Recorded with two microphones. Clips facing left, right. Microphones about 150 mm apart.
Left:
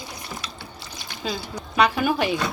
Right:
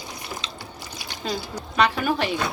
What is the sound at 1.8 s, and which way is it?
Speech, 10° left (ahead or behind).